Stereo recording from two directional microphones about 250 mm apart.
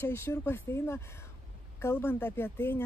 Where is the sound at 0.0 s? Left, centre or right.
Centre.